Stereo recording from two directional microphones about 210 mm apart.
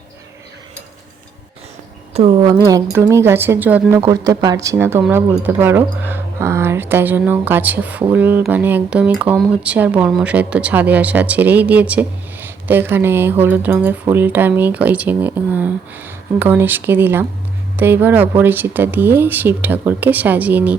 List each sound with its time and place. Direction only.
2.1 s a woman's voice: 25° right (ahead or behind); by 20.7 s 10° right (ahead or behind)